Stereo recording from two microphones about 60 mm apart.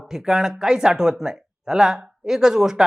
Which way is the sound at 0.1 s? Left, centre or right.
Centre.